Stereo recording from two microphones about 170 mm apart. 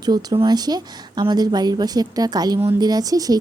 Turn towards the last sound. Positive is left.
turn(degrees=-20)  # may be behind; listen again after turning